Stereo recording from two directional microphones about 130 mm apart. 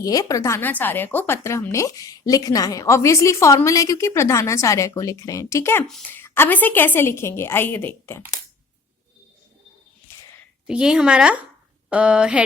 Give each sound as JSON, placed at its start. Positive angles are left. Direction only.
{"t": 0.0, "sound": "a woman's voice", "side_deg": 25}
{"t": 10.7, "sound": "speech", "side_deg": -5}
{"t": 11.9, "sound": "a sound", "side_deg": -10}